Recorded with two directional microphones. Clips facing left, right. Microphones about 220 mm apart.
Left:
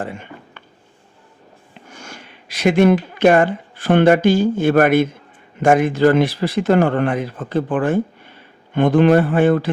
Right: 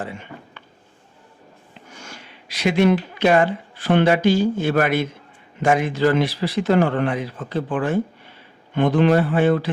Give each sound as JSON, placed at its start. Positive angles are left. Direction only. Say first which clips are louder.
{"t": 0.0, "sound": "speech", "louder": "left 3 dB", "side_deg": 50}
{"t": 2.0, "sound": "speech", "louder": "left 3 dB", "side_deg": 50}